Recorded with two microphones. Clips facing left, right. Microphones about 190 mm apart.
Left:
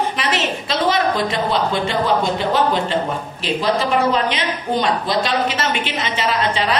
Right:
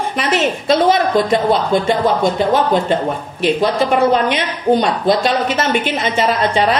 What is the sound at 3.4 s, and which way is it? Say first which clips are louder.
A woman's voice: right 5 dB; 55° right (ahead or behind).